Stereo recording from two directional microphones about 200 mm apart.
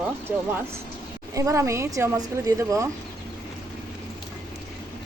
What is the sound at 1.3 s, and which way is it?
A woman's voice, 15° right (ahead or behind).